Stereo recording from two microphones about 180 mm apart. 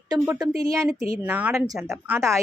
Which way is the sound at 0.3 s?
20° right (ahead or behind).